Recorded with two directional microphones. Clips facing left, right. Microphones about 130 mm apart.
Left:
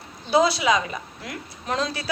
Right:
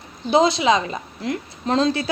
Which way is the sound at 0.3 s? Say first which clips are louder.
Right 3 dB; 25° right (ahead or behind).